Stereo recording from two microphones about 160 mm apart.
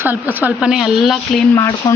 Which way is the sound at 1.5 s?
25° left (ahead or behind).